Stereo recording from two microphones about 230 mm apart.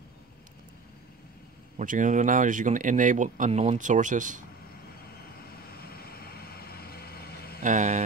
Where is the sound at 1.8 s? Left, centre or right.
Right.